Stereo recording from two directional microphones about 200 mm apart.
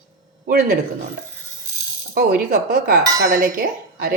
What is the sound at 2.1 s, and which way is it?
Speech, 50° right (ahead or behind).